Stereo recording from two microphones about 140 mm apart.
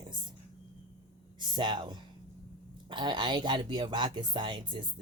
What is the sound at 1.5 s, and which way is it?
Speech, 35° right (ahead or behind).